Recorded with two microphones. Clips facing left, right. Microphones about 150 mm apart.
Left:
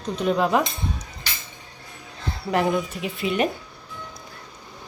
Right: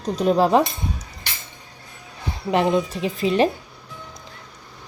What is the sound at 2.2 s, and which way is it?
A woman's voice, 15° right (ahead or behind).